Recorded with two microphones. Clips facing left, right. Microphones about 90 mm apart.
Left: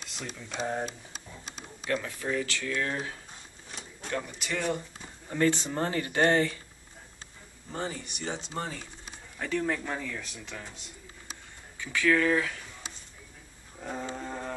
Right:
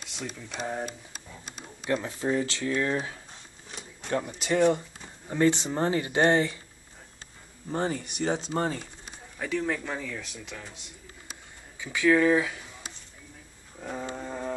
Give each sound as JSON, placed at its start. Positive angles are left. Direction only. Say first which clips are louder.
{"t": 0.5, "sound": "speech", "louder": "left 2 dB", "side_deg": 0}
{"t": 1.9, "sound": "speech", "louder": "right 3 dB", "side_deg": -25}
{"t": 4.4, "sound": "speech", "louder": "right 11 dB", "side_deg": -30}
{"t": 7.7, "sound": "speech", "louder": "right 6 dB", "side_deg": -40}
{"t": 9.4, "sound": "speech", "louder": "right 1 dB", "side_deg": 0}
{"t": 11.8, "sound": "speech", "louder": "right 3 dB", "side_deg": -15}
{"t": 13.7, "sound": "roaring cats", "louder": "right 1 dB", "side_deg": 0}